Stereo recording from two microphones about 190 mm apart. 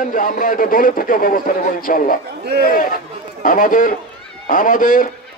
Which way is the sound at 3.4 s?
45° left (ahead or behind).